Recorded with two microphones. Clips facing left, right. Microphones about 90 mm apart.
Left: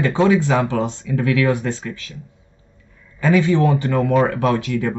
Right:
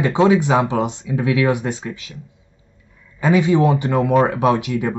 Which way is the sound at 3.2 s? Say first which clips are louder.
Right 1 dB; 15° right (ahead or behind).